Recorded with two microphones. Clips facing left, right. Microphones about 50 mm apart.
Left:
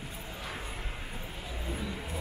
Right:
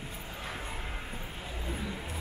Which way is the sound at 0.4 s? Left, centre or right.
Right.